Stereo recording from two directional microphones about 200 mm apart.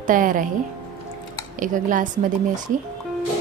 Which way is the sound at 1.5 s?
40° right (ahead or behind).